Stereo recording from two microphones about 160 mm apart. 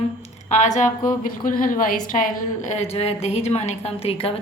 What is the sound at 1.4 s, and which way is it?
A woman's voice, 60° left (ahead or behind).